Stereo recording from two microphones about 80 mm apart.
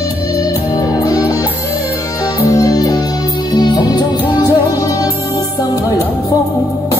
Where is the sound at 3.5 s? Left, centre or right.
Left.